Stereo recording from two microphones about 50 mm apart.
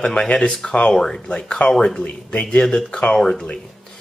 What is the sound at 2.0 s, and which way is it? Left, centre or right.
Speech, left.